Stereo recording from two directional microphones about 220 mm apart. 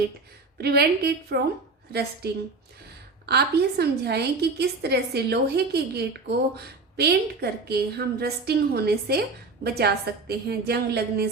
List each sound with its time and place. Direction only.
0.6 s a woman's voice: 45° right (ahead or behind)